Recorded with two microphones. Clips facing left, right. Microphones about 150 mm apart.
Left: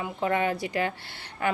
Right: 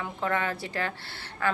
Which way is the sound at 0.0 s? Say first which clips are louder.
Left 3 dB; 15° left (ahead or behind).